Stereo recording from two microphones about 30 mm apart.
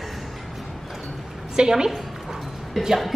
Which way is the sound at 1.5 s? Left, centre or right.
Right.